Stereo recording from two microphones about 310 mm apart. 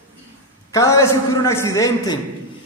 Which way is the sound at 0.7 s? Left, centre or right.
Centre.